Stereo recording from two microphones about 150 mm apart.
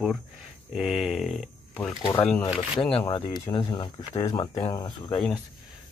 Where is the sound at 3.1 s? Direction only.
35° left (ahead or behind).